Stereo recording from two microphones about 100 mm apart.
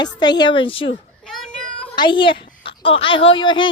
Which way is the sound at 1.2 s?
Centre (ahead or behind).